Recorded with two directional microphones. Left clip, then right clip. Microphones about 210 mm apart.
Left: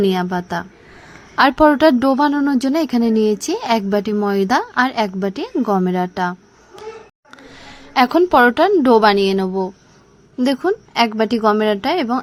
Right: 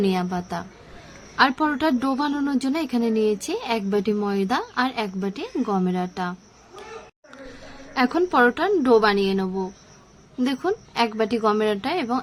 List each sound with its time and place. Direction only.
0.0 s speech: 20° left (ahead or behind)
7.9 s speech: 35° left (ahead or behind)